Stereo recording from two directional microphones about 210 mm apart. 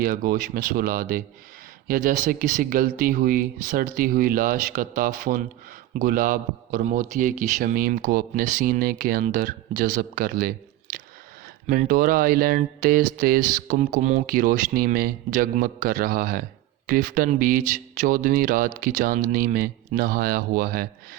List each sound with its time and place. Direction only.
0.0 s a man's voice: 45° right (ahead or behind)
11.6 s speech: 35° right (ahead or behind)